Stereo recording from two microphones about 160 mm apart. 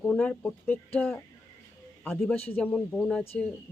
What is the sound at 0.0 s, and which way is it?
Speech, 10° left (ahead or behind).